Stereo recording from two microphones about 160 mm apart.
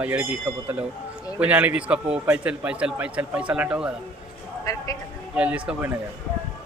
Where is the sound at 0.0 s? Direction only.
10° right (ahead or behind).